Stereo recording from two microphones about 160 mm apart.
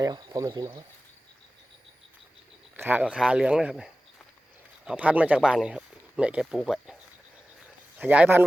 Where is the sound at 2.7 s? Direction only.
10° right (ahead or behind).